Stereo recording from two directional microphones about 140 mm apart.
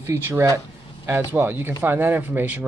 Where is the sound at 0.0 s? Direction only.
20° right (ahead or behind).